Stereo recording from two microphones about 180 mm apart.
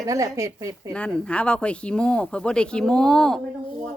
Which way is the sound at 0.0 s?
20° right (ahead or behind).